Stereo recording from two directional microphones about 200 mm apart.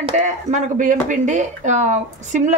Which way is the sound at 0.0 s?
35° right (ahead or behind).